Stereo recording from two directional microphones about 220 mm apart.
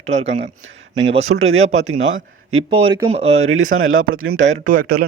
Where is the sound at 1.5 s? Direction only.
30° right (ahead or behind).